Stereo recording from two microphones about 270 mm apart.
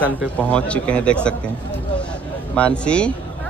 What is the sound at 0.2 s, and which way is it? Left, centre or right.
Speech, centre.